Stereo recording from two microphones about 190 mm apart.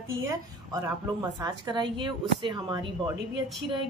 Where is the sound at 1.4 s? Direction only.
25° right (ahead or behind).